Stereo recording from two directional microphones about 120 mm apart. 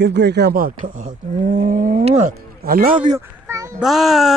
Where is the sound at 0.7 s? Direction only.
90° right.